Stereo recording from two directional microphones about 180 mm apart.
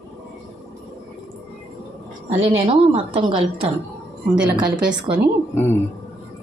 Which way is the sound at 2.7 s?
30° right (ahead or behind).